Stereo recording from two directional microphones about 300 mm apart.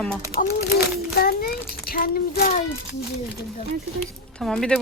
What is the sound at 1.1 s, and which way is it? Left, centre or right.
Child singing, left.